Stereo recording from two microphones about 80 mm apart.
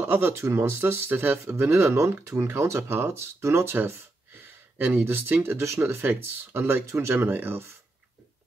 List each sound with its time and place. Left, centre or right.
0.0 s speech: right